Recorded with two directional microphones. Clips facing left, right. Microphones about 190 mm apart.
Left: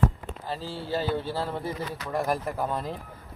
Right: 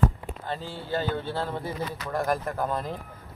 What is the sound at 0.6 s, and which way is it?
Speech, 35° left (ahead or behind).